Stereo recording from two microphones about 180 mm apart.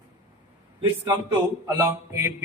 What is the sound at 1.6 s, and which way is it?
Speech, 15° right (ahead or behind).